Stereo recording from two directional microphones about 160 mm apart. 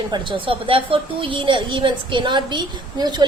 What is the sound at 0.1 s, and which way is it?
A woman's voice, 30° right (ahead or behind).